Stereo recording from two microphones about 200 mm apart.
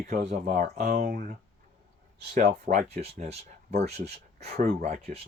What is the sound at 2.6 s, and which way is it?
Speech, 50° right (ahead or behind).